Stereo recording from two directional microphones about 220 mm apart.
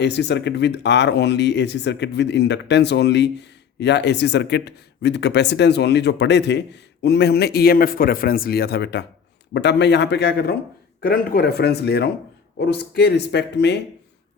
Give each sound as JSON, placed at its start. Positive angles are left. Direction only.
{"t": 0.0, "sound": "speech", "side_deg": 50}